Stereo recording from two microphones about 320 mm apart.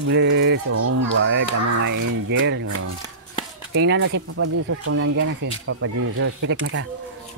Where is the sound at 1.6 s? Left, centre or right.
Right.